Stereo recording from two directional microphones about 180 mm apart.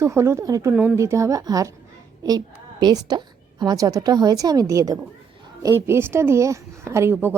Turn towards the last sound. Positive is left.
turn(degrees=-10)  # may be behind; listen again after turning